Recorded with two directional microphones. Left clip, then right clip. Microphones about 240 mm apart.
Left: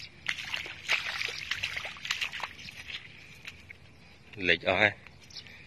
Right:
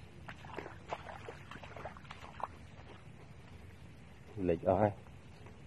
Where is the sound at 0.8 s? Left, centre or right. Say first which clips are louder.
Left 17 dB; centre.